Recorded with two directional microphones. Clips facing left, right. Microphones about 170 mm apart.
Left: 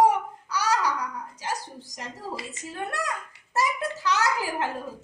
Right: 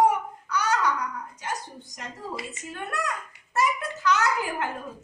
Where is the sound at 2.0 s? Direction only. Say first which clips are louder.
Even; 30° left (ahead or behind).